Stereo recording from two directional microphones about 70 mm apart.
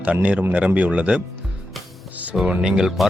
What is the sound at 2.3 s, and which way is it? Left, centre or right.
Speech, centre.